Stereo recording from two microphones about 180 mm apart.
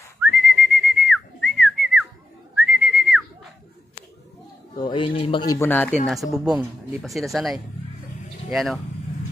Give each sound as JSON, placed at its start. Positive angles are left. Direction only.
{"t": 0.3, "sound": "whistling", "side_deg": 0}
{"t": 4.7, "sound": "speech", "side_deg": 25}
{"t": 5.7, "sound": "speech", "side_deg": 10}
{"t": 6.0, "sound": "speech", "side_deg": 0}